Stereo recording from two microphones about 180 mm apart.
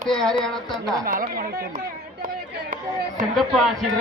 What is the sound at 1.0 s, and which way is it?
Speech, 50° right (ahead or behind).